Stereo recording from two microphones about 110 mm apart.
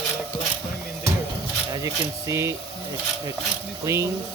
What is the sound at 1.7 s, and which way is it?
Speech, 30° right (ahead or behind).